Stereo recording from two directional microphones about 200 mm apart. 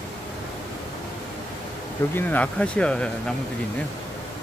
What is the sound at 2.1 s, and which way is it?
Speech, 10° left (ahead or behind).